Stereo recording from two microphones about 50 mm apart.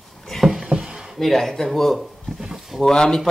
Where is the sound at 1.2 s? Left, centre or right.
Centre.